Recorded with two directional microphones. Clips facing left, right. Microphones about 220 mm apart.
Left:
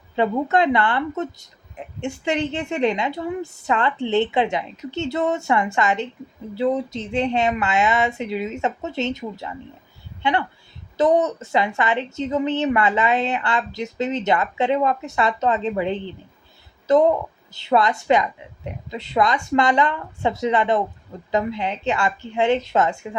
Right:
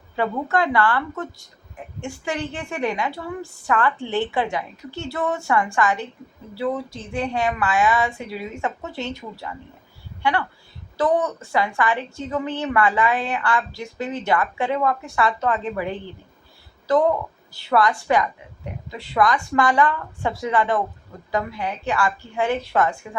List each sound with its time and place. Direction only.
0.2 s a woman's voice: 20° left (ahead or behind)
10.9 s a woman's voice: 20° left (ahead or behind)